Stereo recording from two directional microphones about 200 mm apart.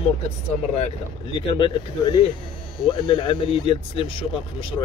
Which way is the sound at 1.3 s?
25° left (ahead or behind).